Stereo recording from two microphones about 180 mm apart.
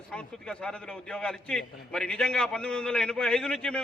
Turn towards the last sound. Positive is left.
turn(degrees=5)  # may be behind; listen again after turning